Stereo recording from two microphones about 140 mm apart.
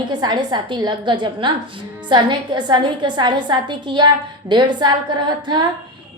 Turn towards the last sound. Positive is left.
turn(degrees=-35)  # may be behind; listen again after turning